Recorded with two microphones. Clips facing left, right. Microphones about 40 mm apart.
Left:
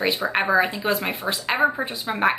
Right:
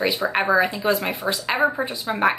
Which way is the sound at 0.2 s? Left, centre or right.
Centre.